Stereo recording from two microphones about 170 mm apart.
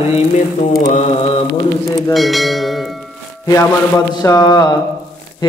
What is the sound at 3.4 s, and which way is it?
A man's voice, 20° left (ahead or behind).